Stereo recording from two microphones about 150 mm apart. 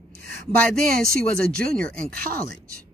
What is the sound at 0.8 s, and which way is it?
Speech, 75° right (ahead or behind).